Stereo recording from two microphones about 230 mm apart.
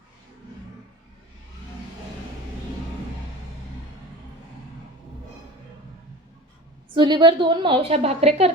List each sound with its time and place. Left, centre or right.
6.9 s a woman's voice: centre